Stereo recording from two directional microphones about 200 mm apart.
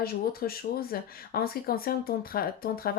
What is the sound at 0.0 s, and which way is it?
Speech, 50° left (ahead or behind).